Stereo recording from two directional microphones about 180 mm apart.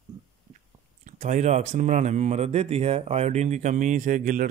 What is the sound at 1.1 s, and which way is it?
Speech, 40° right (ahead or behind).